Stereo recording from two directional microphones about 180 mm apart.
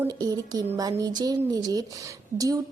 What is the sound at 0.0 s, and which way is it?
Speech, 20° right (ahead or behind).